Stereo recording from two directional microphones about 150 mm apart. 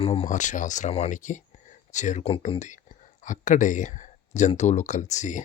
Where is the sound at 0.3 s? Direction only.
55° left (ahead or behind).